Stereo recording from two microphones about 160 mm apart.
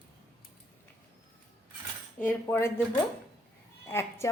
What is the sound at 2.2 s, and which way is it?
Speech, 10° left (ahead or behind).